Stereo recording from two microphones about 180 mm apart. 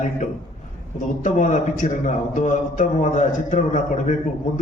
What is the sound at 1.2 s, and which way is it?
A man's voice, 45° left (ahead or behind).